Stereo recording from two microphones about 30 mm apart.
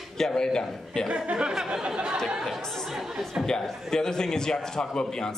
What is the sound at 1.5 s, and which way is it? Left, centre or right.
Speech, right.